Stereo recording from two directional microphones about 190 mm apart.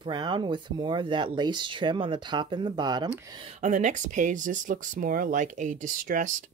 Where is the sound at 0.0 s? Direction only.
25° right (ahead or behind).